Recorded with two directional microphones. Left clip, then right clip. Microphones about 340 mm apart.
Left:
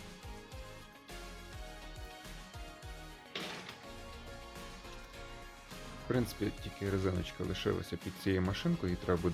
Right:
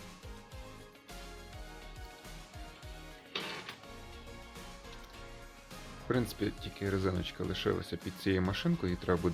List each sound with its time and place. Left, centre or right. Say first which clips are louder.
6.1 s speech: right 2 dB; centre